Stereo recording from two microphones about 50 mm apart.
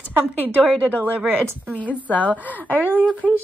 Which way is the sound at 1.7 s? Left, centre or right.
Left.